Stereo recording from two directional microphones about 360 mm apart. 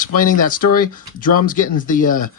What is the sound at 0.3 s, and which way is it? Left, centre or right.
Speech, left.